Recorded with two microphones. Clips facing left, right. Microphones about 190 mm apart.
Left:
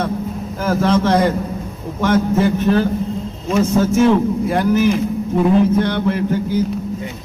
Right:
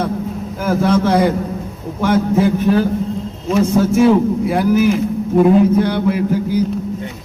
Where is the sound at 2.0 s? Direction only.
15° right (ahead or behind).